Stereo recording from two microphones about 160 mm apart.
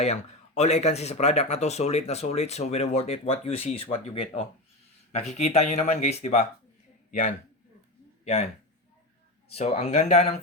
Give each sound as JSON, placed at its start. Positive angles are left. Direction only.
{"t": 0.0, "sound": "a man's voice", "side_deg": 40}
{"t": 8.2, "sound": "a man's voice", "side_deg": 40}
{"t": 9.6, "sound": "speech", "side_deg": 40}